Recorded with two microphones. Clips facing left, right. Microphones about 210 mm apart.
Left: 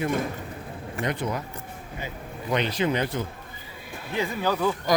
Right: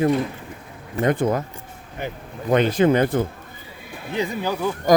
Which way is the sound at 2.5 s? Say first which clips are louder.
Right 8 dB; 50° right (ahead or behind).